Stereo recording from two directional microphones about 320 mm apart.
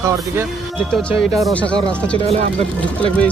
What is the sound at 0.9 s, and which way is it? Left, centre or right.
Speech, centre.